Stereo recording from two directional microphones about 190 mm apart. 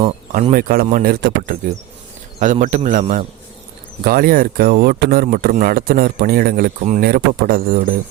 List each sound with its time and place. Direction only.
0.5 s speech: 50° right (ahead or behind)